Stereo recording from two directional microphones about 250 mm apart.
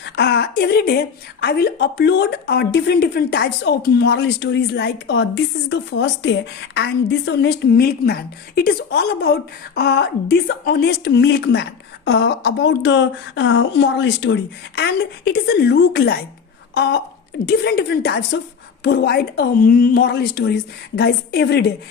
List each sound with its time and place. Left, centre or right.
0.0 s a woman's voice: left